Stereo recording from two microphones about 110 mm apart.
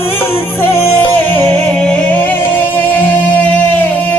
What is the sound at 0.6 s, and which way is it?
Speech, 20° left (ahead or behind).